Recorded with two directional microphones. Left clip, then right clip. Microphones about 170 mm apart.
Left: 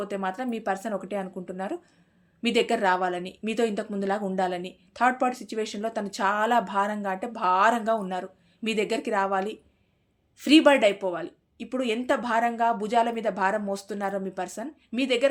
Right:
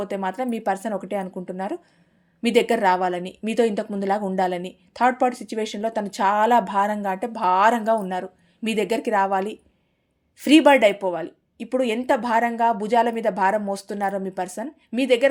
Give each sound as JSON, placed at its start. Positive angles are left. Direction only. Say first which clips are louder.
{"t": 0.0, "sound": "a woman's voice", "louder": "right 4 dB", "side_deg": -30}